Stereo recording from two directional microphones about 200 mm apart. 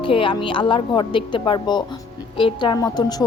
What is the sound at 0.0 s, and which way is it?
A woman's voice, 25° left (ahead or behind).